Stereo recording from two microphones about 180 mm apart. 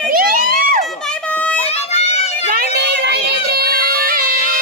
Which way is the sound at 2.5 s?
55° right (ahead or behind).